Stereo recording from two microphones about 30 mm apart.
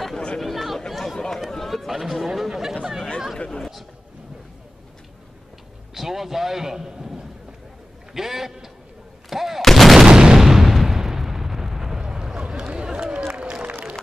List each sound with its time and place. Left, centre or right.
0.4 s chatter: centre
1.7 s speech: centre
5.9 s a man's voice: centre
9.3 s artillery fire: centre
9.6 s artillery fire: centre
10.0 s artillery fire: right
10.4 s a sound: centre
11.0 s explosion: centre
12.0 s vehicle: right
12.4 s run: right
13.3 s a sound: right